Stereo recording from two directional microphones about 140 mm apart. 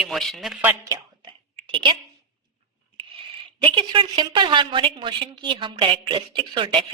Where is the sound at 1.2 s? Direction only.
35° right (ahead or behind).